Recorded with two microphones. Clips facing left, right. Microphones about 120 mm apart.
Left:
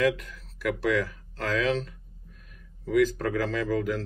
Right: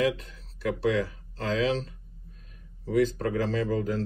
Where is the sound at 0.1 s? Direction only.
30° right (ahead or behind).